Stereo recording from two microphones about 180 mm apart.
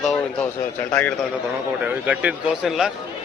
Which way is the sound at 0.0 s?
Centre (ahead or behind).